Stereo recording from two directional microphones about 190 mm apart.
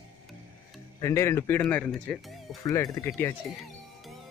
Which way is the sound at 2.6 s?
15° left (ahead or behind).